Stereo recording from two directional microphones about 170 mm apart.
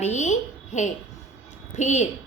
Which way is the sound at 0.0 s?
45° left (ahead or behind).